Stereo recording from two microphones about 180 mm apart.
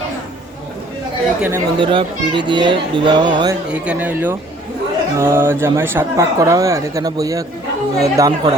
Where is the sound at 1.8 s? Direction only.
30° right (ahead or behind).